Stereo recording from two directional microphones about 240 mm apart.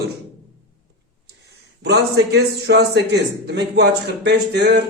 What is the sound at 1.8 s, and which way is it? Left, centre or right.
A man's voice, right.